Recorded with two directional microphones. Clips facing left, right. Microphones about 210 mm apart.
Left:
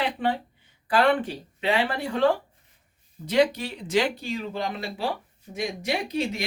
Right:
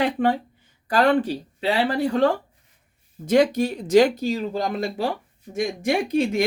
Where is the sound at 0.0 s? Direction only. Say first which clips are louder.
Right 5 dB; 45° right (ahead or behind).